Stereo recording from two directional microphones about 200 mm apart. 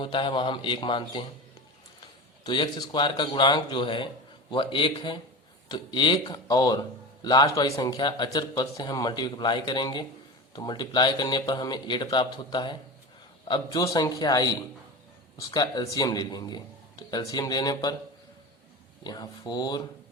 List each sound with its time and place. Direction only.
0.0 s speech: 25° left (ahead or behind)
2.4 s speech: 25° left (ahead or behind)
19.0 s speech: 20° left (ahead or behind)